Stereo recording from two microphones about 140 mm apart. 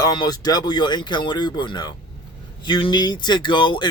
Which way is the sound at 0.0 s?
30° left (ahead or behind).